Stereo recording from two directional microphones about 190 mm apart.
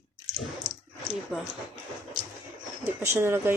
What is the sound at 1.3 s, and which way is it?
Speech, centre (ahead or behind).